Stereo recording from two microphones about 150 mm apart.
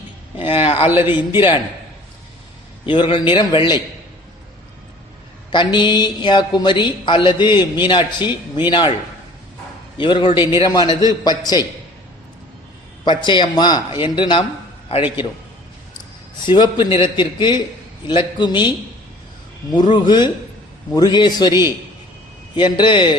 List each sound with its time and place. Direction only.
0.3 s a sound: 40° left (ahead or behind)
0.9 s speech: 15° right (ahead or behind)
2.8 s speech: 35° left (ahead or behind)
5.5 s speech: 30° left (ahead or behind)
10.0 s a man's voice: 30° left (ahead or behind)
13.1 s speech: 30° left (ahead or behind)
16.5 s speech: 30° left (ahead or behind)
19.7 s a man's voice: 30° left (ahead or behind)